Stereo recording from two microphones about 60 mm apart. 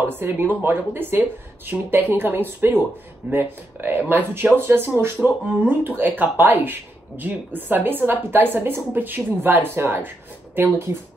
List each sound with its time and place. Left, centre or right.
0.1 s speech: right